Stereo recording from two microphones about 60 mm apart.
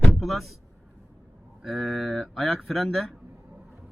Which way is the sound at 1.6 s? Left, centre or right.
Centre.